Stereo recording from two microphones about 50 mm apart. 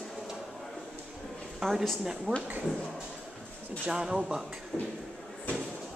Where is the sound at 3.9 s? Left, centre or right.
Centre.